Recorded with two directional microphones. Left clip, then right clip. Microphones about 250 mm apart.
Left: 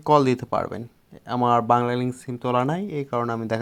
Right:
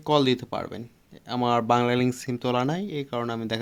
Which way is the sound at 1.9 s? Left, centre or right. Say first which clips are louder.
Right 2 dB; centre.